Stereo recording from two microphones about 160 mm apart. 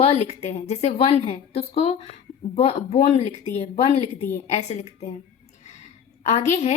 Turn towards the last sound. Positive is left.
turn(degrees=45)  # may be behind; listen again after turning